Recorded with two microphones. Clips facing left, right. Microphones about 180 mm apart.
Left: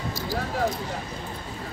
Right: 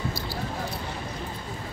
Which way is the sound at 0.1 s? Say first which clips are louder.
Left 4 dB; 45° left (ahead or behind).